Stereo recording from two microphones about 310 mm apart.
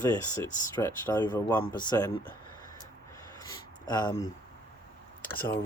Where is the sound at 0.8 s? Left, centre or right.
Centre.